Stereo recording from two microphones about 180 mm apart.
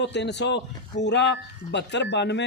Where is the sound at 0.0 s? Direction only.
75° left (ahead or behind).